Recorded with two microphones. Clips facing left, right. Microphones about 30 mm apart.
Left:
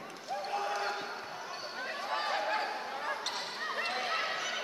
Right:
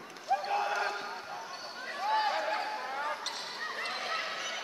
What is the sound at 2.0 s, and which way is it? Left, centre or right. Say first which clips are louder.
Basketball bounce: right 4 dB; centre.